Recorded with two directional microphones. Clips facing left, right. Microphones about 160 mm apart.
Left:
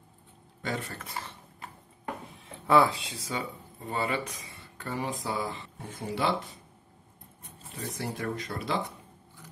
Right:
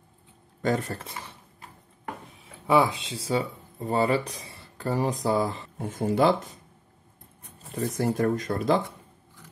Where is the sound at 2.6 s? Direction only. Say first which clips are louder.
Right 1 dB; 15° right (ahead or behind); by 6.5 s 45° right (ahead or behind).